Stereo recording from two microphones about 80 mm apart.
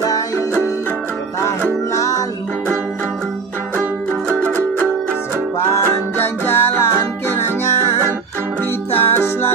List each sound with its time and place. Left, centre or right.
2.0 s music: left
5.7 s music: left
8.9 s music: left